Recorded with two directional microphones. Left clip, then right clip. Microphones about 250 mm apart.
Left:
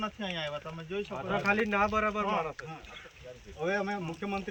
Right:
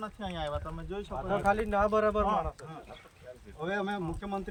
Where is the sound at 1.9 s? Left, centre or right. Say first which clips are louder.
Right 2 dB; right.